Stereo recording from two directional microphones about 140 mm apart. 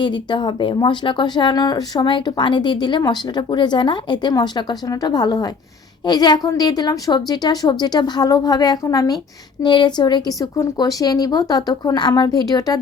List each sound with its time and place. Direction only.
0.0 s a woman's voice: 35° left (ahead or behind)